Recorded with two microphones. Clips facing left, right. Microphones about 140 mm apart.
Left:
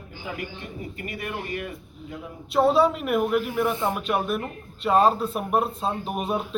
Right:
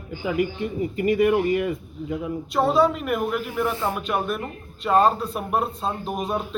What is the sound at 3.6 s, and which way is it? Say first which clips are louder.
Speech: even; 20° left (ahead or behind).